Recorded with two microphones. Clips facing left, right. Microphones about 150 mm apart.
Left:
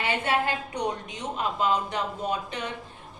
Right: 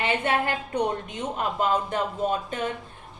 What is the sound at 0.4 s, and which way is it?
Speech, 55° right (ahead or behind).